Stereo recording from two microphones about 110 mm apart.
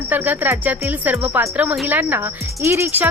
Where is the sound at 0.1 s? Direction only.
15° right (ahead or behind).